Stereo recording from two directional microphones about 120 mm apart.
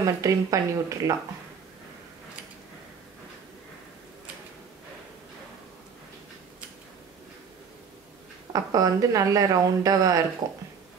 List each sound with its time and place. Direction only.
0.0 s speech: 25° right (ahead or behind)
8.5 s speech: 30° right (ahead or behind)